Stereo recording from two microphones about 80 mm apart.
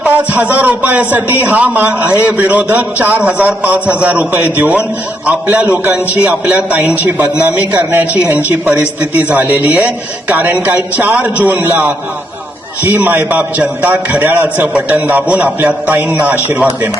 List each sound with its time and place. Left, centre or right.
0.0 s speech: centre